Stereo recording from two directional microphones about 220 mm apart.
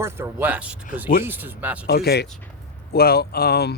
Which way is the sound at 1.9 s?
45° left (ahead or behind).